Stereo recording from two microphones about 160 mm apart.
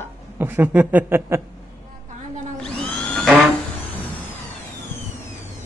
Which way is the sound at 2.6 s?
5° left (ahead or behind).